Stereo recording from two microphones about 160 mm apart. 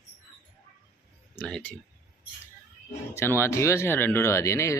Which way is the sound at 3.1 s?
15° left (ahead or behind).